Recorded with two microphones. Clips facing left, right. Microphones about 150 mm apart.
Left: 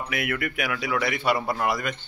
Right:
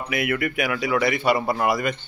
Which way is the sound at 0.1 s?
Centre (ahead or behind).